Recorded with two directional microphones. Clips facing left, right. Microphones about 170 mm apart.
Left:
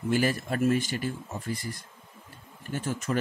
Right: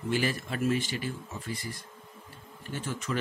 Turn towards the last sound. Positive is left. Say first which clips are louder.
# left 4 dB
turn(degrees=45)  # may be behind; listen again after turning